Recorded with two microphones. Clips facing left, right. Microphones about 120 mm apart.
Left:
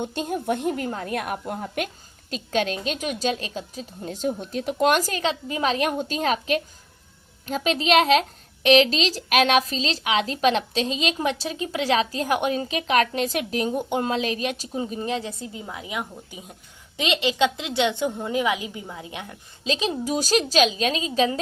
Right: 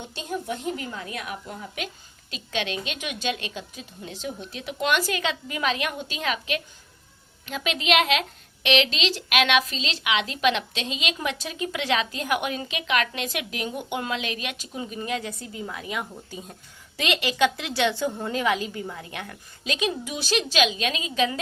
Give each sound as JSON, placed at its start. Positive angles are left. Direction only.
{"t": 0.0, "sound": "a woman's voice", "side_deg": 50}
{"t": 19.7, "sound": "a woman's voice", "side_deg": 30}